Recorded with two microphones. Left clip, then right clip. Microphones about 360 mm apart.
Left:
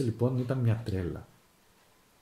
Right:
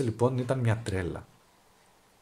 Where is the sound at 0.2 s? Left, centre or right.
Right.